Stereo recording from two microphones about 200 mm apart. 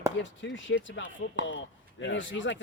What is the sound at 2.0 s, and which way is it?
Speech, 65° left (ahead or behind).